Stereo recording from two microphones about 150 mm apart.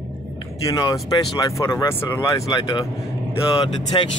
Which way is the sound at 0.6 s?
25° left (ahead or behind).